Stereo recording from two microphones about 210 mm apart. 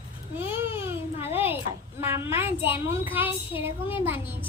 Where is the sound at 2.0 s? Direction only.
10° right (ahead or behind).